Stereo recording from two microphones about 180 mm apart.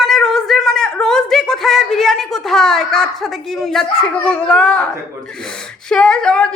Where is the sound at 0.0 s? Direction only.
Centre (ahead or behind).